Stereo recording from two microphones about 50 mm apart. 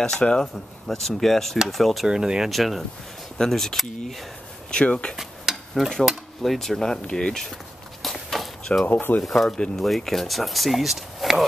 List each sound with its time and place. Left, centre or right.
0.0 s speech: centre
0.8 s speech: centre
2.0 s speech: centre
2.5 s speech: centre
4.6 s speech: centre
5.1 s a sound: centre
5.8 s speech: centre
8.0 s a sound: centre
9.2 s speech: centre
9.5 s speech: centre